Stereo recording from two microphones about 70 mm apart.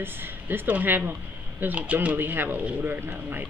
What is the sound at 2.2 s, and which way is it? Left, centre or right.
A woman's voice, right.